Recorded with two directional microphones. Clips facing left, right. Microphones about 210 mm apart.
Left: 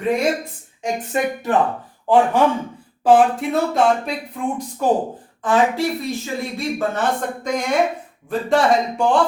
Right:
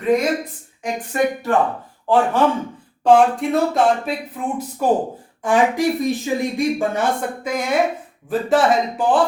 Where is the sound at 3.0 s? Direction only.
5° left (ahead or behind).